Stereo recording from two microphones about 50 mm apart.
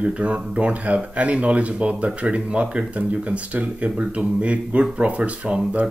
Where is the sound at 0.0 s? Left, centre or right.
Right.